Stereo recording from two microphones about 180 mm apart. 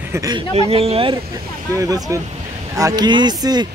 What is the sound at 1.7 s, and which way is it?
Speech, 20° right (ahead or behind).